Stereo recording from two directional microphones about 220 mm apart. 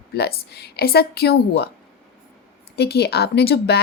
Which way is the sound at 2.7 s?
45° left (ahead or behind).